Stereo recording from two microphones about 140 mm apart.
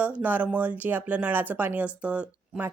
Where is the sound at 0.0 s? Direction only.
10° right (ahead or behind).